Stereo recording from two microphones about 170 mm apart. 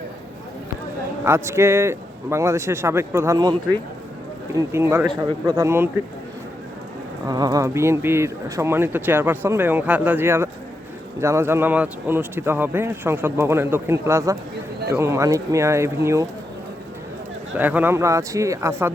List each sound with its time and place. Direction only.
1.2 s speech: 15° right (ahead or behind)
4.5 s speech: 15° right (ahead or behind)
7.3 s speech: 20° right (ahead or behind)
17.6 s speech: 10° right (ahead or behind)